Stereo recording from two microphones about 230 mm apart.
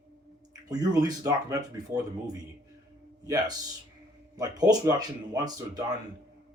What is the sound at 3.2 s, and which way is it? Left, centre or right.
Speech, centre.